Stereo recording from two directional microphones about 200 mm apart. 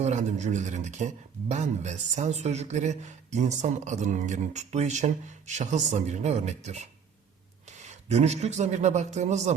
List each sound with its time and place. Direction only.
0.0 s a man's voice: 35° right (ahead or behind)
7.9 s a man's voice: 35° right (ahead or behind)